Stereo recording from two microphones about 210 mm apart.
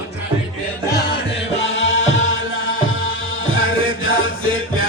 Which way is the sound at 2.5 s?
70° left (ahead or behind).